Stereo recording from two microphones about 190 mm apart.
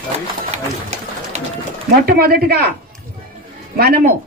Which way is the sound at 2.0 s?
55° right (ahead or behind).